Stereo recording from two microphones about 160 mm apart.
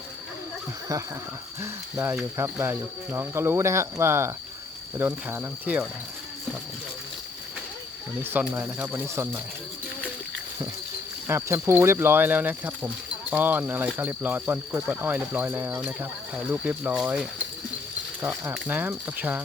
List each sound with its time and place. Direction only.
1.6 s speech: 10° right (ahead or behind)
8.2 s speech: 10° right (ahead or behind)
11.3 s speech: 15° right (ahead or behind)